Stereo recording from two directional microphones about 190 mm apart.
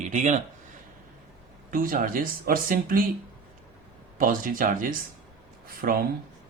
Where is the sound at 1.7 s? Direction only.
45° right (ahead or behind).